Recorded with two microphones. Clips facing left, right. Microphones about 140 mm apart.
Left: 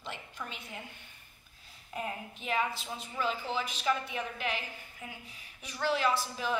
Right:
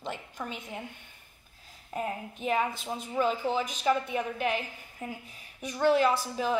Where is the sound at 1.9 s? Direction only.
40° right (ahead or behind).